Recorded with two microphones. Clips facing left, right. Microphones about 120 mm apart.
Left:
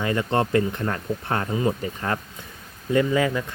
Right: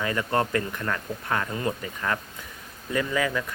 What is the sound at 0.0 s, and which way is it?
Speech, 25° left (ahead or behind).